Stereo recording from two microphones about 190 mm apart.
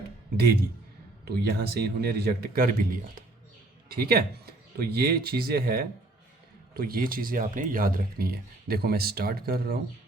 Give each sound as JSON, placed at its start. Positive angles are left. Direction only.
{"t": 1.2, "sound": "speech", "side_deg": -55}